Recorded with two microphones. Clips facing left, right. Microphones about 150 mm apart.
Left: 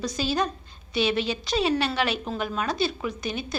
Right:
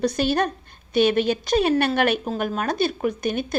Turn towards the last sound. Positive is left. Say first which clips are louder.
# right 7 dB
turn(degrees=-55)  # may be behind; listen again after turning